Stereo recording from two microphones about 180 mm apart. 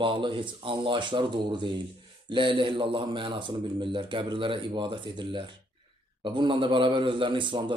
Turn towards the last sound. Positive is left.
turn(degrees=-25)  # may be behind; listen again after turning